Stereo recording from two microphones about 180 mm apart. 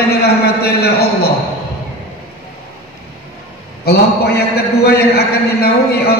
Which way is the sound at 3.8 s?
60° left (ahead or behind).